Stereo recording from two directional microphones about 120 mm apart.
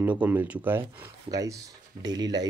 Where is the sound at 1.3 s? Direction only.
30° right (ahead or behind).